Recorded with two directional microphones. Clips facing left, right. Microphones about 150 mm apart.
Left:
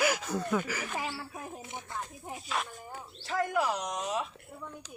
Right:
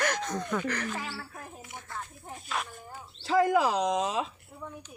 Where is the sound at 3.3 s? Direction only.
90° right.